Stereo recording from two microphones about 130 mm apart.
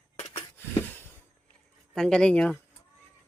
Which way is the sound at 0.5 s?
15° left (ahead or behind).